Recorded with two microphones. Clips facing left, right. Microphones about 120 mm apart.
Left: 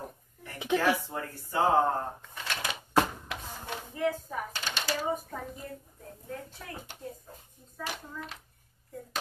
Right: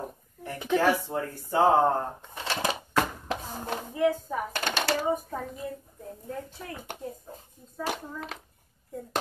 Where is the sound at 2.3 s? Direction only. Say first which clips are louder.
Right 8 dB; 30° right (ahead or behind).